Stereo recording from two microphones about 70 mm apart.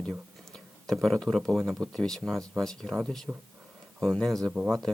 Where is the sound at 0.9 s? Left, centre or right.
Centre.